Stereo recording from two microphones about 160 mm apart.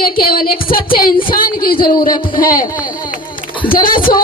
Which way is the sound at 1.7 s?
30° left (ahead or behind).